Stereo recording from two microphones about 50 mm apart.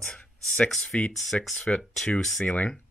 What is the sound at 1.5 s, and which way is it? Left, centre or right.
Speech, centre.